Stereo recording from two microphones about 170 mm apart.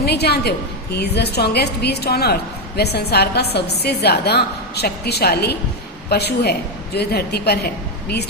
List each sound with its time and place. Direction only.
0.0 s a woman's voice: 75° left (ahead or behind)